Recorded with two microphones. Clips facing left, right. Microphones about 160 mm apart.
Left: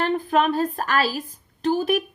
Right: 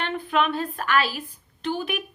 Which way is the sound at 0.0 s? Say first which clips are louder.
Left 4 dB; 40° left (ahead or behind).